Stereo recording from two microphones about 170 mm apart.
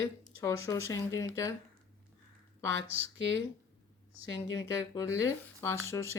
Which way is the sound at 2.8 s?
35° right (ahead or behind).